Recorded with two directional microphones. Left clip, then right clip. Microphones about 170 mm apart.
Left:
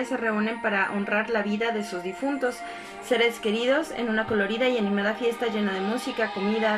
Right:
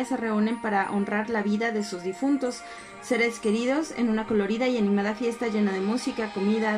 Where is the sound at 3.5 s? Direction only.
20° right (ahead or behind).